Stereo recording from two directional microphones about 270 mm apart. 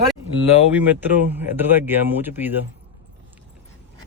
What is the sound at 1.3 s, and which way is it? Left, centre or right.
A man's voice, centre.